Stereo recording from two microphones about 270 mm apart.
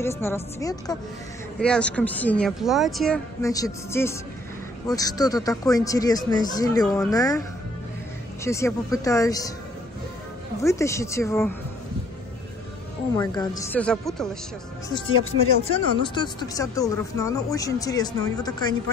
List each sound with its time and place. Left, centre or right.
0.0 s speech: centre
3.4 s speech: centre
8.5 s speech: centre
10.6 s speech: centre
13.1 s speech: centre
15.0 s speech: left
15.7 s speech: centre